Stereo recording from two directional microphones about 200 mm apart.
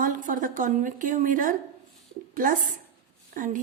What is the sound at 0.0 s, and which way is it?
A woman's voice, 40° right (ahead or behind).